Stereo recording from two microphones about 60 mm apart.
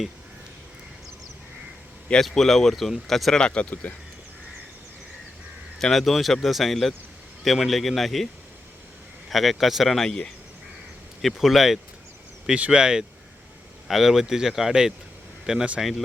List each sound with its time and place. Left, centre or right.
2.2 s speech: centre
3.4 s speech: centre
5.8 s speech: centre
9.3 s speech: centre
12.5 s speech: centre
15.8 s speech: centre